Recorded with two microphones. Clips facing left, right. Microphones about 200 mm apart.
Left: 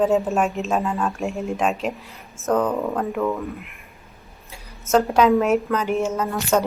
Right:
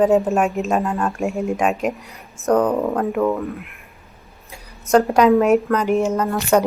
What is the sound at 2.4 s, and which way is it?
Speech, 15° right (ahead or behind).